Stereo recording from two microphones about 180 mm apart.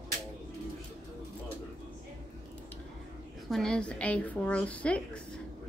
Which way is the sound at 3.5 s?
Centre (ahead or behind).